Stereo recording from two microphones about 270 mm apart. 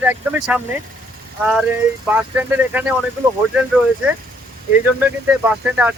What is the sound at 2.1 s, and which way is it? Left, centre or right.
Speech, centre.